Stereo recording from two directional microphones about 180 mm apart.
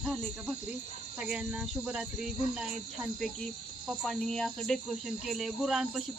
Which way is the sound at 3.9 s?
Centre (ahead or behind).